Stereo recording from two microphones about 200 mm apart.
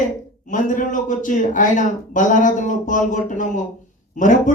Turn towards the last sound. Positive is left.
turn(degrees=40)  # may be behind; listen again after turning